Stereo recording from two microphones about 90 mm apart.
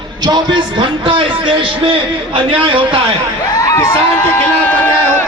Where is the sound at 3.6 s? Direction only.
35° left (ahead or behind).